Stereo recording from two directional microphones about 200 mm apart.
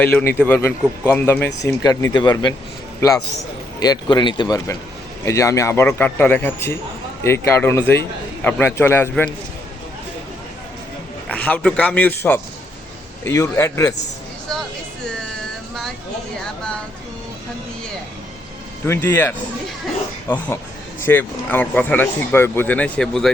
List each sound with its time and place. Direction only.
0.0 s speech: 10° left (ahead or behind)
3.8 s speech: 20° left (ahead or behind)
11.3 s speech: 5° left (ahead or behind)
18.9 s speech: 10° left (ahead or behind)